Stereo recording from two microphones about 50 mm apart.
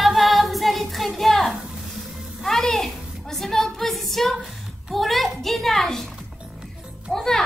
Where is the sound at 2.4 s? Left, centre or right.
Centre.